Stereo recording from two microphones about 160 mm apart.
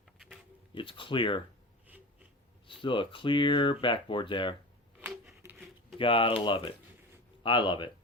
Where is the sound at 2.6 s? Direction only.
30° left (ahead or behind).